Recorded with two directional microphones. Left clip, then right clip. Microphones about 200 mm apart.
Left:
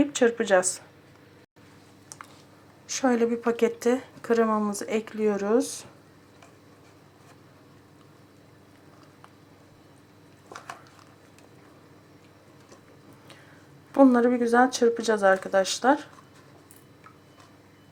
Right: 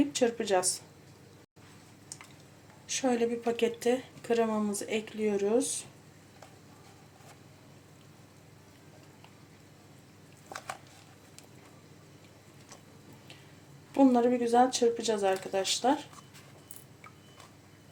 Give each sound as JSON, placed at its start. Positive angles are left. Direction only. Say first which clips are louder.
{"t": 0.0, "sound": "speech", "louder": "left 6 dB", "side_deg": 10}
{"t": 2.8, "sound": "speech", "louder": "left 5 dB", "side_deg": 15}
{"t": 13.9, "sound": "a woman's voice", "louder": "left 5 dB", "side_deg": 15}